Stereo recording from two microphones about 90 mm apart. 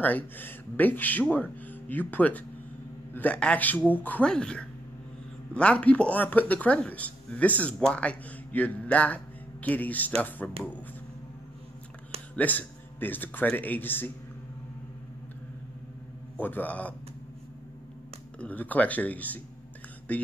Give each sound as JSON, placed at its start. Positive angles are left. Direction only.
{"t": 0.0, "sound": "speech", "side_deg": 20}
{"t": 4.3, "sound": "speech", "side_deg": 10}
{"t": 12.4, "sound": "speech", "side_deg": 20}
{"t": 16.3, "sound": "speech", "side_deg": 20}
{"t": 18.4, "sound": "speech", "side_deg": 20}